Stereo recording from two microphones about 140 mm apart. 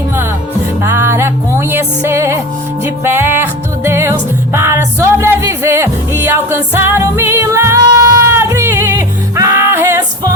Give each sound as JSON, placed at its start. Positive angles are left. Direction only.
{"t": 0.8, "sound": "music", "side_deg": -20}